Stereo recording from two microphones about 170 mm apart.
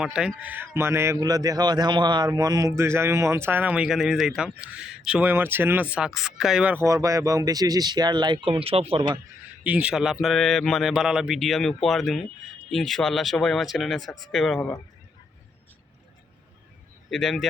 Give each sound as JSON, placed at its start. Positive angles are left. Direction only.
{"t": 0.0, "sound": "speech", "side_deg": -5}
{"t": 6.8, "sound": "speech", "side_deg": -20}
{"t": 9.6, "sound": "a man's voice", "side_deg": -10}
{"t": 17.1, "sound": "a man's voice", "side_deg": 0}